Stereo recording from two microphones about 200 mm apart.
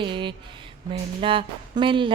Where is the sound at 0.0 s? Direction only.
25° right (ahead or behind).